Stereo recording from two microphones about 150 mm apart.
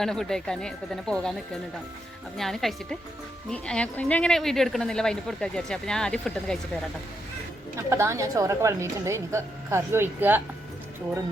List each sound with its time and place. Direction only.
0.0 s speech: 5° left (ahead or behind)
2.4 s speech: centre (ahead or behind)
7.8 s a woman's voice: 20° right (ahead or behind)